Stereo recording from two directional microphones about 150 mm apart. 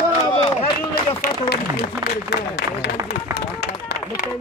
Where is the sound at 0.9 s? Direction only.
90° left.